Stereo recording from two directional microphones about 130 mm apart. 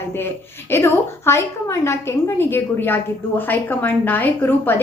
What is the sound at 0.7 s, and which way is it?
A woman's voice, 20° left (ahead or behind).